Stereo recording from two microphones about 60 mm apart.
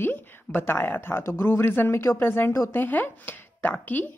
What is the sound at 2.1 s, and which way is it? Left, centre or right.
Speech, left.